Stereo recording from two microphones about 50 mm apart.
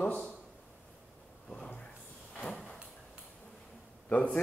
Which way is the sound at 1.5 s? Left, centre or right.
Left.